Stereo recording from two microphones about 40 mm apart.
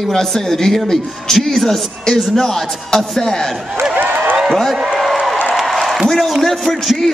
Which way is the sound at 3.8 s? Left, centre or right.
Right.